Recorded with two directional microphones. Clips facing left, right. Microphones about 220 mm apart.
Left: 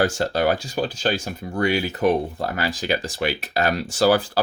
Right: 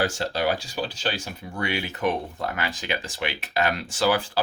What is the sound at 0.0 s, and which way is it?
Speech, 50° left (ahead or behind).